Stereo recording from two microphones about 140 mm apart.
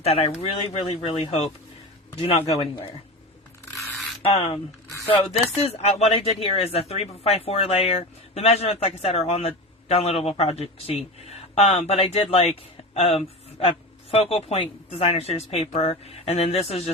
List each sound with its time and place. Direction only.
0.0 s a man's voice: 45° left (ahead or behind)
4.2 s speech: 45° left (ahead or behind)